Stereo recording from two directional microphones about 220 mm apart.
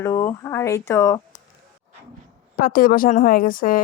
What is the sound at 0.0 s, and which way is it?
Speech, 15° left (ahead or behind).